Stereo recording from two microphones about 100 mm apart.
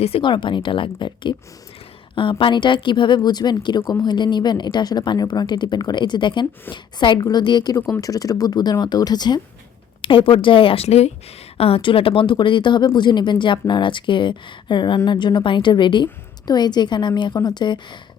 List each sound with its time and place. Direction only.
0.2 s speech: 55° left (ahead or behind)
2.4 s speech: 50° left (ahead or behind)
10.0 s a woman's voice: 60° left (ahead or behind); by 11.1 s 90° left
11.5 s speech: 75° left (ahead or behind); by 18.0 s 50° left (ahead or behind)